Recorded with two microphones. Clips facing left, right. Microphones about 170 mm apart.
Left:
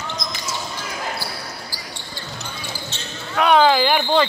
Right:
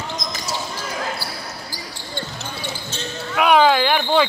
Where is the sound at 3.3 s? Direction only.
5° right (ahead or behind).